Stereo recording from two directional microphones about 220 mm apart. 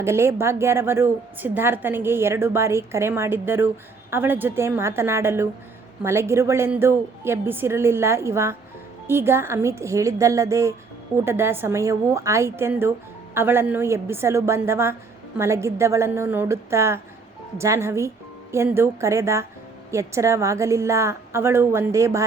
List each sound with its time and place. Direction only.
0.0 s a woman's voice: 10° right (ahead or behind)